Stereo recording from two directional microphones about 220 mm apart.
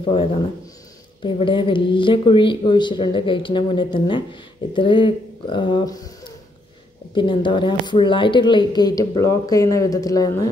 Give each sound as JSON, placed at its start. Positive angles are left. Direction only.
{"t": 0.0, "sound": "speech", "side_deg": 25}